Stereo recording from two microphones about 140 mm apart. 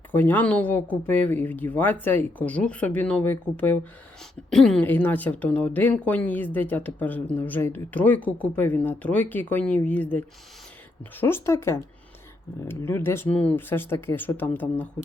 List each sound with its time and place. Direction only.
0.1 s a woman's voice: 15° left (ahead or behind)